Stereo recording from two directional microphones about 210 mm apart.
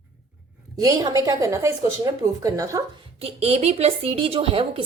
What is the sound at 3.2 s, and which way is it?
A woman's voice, 30° right (ahead or behind).